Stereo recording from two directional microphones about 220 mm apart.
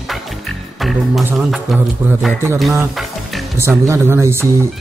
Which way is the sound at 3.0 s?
Centre (ahead or behind).